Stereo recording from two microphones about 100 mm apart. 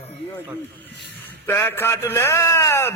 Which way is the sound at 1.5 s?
20° left (ahead or behind).